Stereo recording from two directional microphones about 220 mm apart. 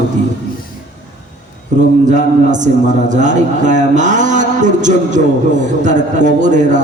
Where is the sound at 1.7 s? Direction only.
35° right (ahead or behind).